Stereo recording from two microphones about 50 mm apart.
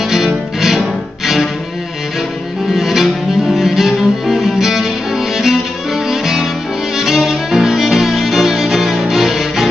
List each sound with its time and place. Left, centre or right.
0.1 s music: centre
2.7 s cello: centre
6.0 s music: centre
7.0 s violin: centre